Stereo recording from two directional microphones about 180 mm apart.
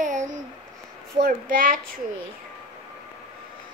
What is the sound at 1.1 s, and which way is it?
Speech, 50° right (ahead or behind).